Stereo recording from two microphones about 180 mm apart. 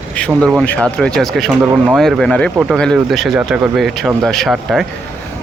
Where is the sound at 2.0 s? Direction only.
Centre (ahead or behind).